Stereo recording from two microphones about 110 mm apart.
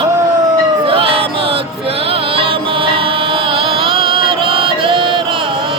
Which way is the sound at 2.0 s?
55° right (ahead or behind).